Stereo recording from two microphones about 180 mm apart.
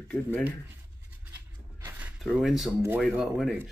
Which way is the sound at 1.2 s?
10° right (ahead or behind).